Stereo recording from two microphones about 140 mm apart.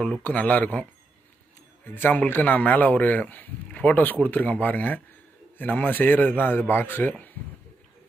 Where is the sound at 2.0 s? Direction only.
15° left (ahead or behind).